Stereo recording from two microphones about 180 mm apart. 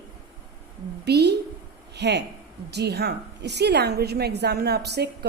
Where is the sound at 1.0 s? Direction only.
65° right (ahead or behind).